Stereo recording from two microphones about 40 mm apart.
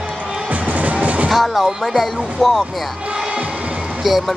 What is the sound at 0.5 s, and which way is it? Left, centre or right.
Music, right.